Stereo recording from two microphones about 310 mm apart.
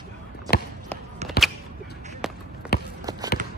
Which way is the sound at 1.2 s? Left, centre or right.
Right.